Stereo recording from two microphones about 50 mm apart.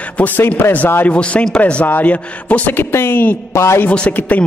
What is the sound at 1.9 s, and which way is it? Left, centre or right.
Speech, left.